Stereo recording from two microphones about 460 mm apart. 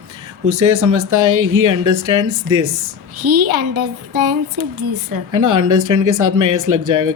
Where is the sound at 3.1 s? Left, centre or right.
Right.